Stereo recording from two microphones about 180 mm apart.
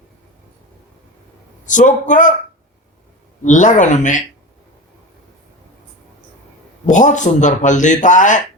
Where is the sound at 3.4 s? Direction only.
45° left (ahead or behind).